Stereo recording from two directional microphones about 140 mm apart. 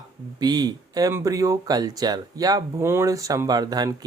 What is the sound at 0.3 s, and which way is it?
Speech, 30° right (ahead or behind).